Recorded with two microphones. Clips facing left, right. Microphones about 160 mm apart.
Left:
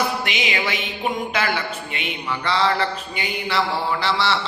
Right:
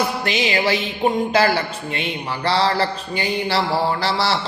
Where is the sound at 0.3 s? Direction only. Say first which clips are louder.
Right 5 dB; 35° right (ahead or behind).